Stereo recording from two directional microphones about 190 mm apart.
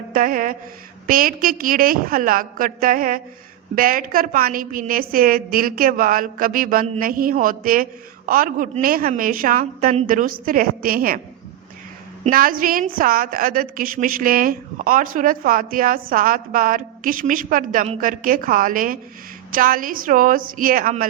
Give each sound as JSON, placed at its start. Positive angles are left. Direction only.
{"t": 0.1, "sound": "a sound", "side_deg": -45}
{"t": 1.0, "sound": "a woman's voice", "side_deg": -50}
{"t": 12.2, "sound": "a woman's voice", "side_deg": -50}